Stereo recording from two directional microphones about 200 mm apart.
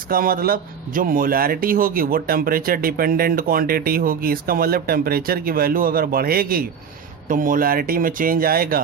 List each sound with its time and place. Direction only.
0.1 s speech: 45° right (ahead or behind)